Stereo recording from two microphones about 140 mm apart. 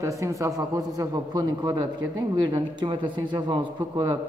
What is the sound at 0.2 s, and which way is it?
A man's voice, 20° right (ahead or behind).